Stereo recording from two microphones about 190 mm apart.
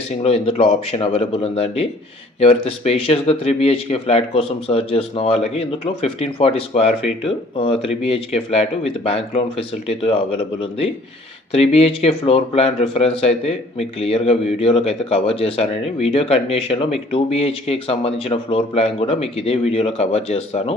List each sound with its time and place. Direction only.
0.2 s speech: 30° left (ahead or behind)